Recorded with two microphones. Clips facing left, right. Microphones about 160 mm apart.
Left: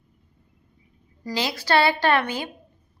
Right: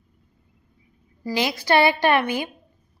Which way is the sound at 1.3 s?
15° right (ahead or behind).